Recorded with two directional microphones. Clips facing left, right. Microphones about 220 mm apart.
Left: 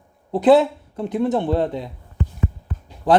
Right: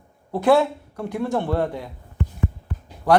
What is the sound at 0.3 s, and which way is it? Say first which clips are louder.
Speech: left 3 dB; 20° left (ahead or behind).